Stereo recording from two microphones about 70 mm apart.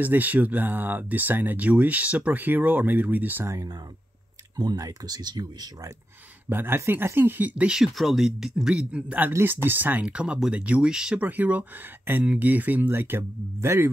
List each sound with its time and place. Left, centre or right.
0.0 s speech: right
4.6 s speech: right
6.5 s speech: right
7.7 s speech: centre
9.4 s speech: right
10.0 s speech: centre
11.1 s speech: right